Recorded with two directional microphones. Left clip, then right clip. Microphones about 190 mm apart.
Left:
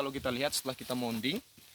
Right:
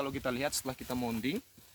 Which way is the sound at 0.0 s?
20° left (ahead or behind).